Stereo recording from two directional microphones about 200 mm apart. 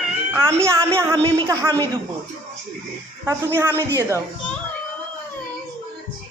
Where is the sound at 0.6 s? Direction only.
15° right (ahead or behind).